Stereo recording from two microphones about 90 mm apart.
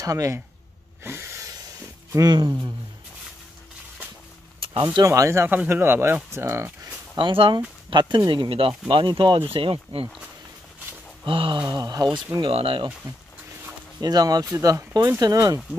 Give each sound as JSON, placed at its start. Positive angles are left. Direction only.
{"t": 0.0, "sound": "speech", "side_deg": -35}
{"t": 1.0, "sound": "a sound", "side_deg": -25}
{"t": 2.1, "sound": "speech", "side_deg": -50}
{"t": 5.0, "sound": "speech", "side_deg": -35}
{"t": 5.5, "sound": "speech", "side_deg": -20}
{"t": 7.2, "sound": "speech", "side_deg": -70}
{"t": 8.3, "sound": "speech", "side_deg": -70}
{"t": 11.2, "sound": "speech", "side_deg": -75}
{"t": 11.6, "sound": "speech", "side_deg": -45}
{"t": 12.4, "sound": "speech", "side_deg": -85}
{"t": 14.0, "sound": "speech", "side_deg": -45}